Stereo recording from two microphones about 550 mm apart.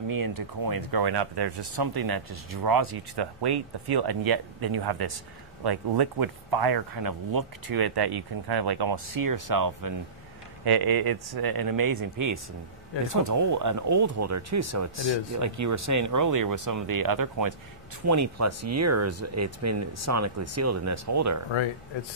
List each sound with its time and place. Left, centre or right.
0.1 s speech: right